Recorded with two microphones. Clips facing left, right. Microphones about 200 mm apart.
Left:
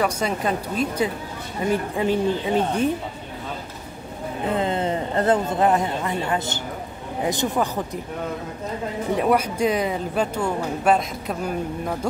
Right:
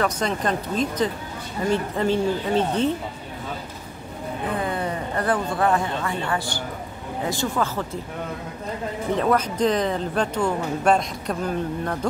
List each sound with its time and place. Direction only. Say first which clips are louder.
0.0 s speech: left 1 dB; 10° left (ahead or behind)
4.6 s speech: left 5 dB; 25° left (ahead or behind)
9.1 s speech: left 1 dB; 10° left (ahead or behind)